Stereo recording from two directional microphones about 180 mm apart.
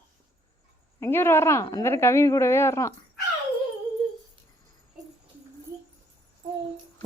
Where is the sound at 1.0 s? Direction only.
15° left (ahead or behind).